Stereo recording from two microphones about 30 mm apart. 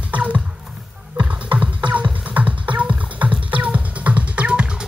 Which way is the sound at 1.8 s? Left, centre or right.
Right.